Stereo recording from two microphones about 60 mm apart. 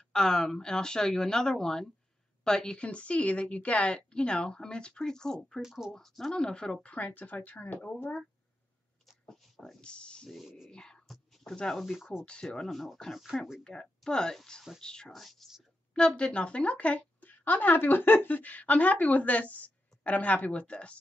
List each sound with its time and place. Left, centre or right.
0.1 s a woman's voice: centre
5.6 s speech: centre
5.9 s speech: centre; by 7.9 s left
9.3 s speech: centre
10.3 s speech: centre
10.7 s speech: centre
11.7 s speech: centre
12.4 s a woman's voice: centre
15.1 s speech: centre
15.9 s speech: centre